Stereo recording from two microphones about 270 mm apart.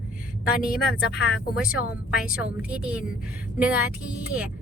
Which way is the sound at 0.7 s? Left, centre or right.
Left.